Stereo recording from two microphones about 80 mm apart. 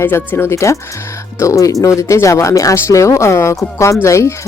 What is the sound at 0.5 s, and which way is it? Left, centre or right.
Speech, left.